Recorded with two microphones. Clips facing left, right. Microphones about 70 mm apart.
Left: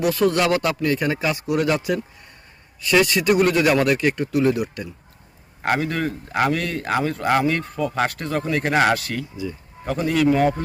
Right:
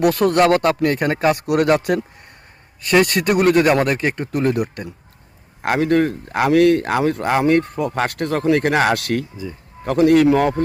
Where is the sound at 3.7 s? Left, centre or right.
Right.